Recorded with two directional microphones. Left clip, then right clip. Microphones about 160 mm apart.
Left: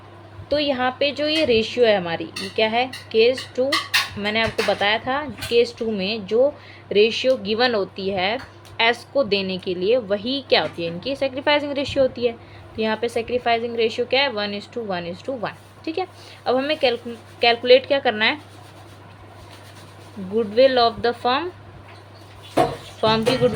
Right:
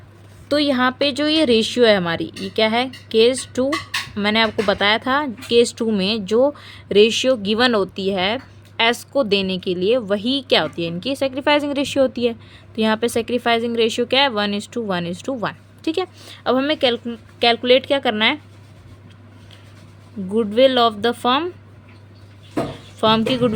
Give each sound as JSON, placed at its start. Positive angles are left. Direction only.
{"t": 0.4, "sound": "a woman's voice", "side_deg": -65}
{"t": 20.3, "sound": "a woman's voice", "side_deg": -50}
{"t": 23.0, "sound": "a woman's voice", "side_deg": -45}